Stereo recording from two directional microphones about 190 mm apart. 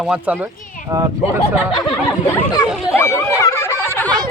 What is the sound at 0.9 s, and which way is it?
Speech, 20° right (ahead or behind).